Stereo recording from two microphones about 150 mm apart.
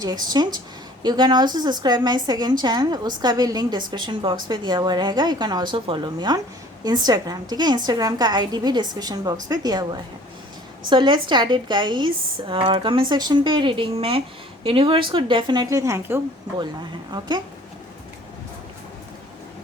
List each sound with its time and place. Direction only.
0.0 s a woman's voice: 25° right (ahead or behind)
17.1 s a woman's voice: 30° right (ahead or behind)